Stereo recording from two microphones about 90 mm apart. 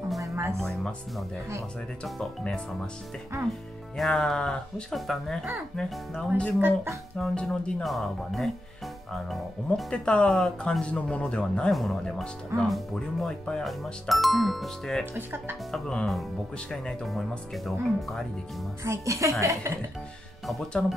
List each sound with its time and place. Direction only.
0.2 s music: 30° right (ahead or behind)
0.6 s speech: 5° left (ahead or behind)
3.9 s speech: 5° left (ahead or behind)
6.6 s speech: 25° right (ahead or behind)
7.2 s speech: 5° left (ahead or behind)
9.8 s speech: 10° left (ahead or behind)
15.1 s speech: 25° right (ahead or behind)
15.7 s speech: 5° left (ahead or behind)
18.9 s speech: 35° right (ahead or behind)